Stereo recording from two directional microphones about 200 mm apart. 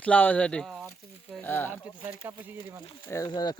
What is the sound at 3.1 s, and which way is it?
Speech, 15° left (ahead or behind).